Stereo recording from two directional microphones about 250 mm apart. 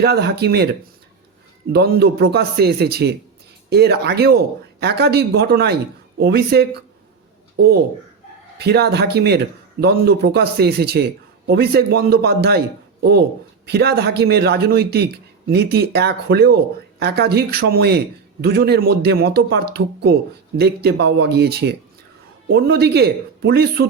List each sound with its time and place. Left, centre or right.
0.0 s a man's voice: right
1.7 s a man's voice: right